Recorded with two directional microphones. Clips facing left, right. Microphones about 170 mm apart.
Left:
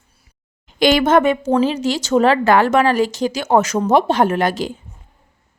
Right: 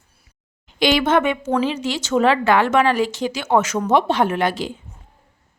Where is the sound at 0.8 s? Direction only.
45° left (ahead or behind).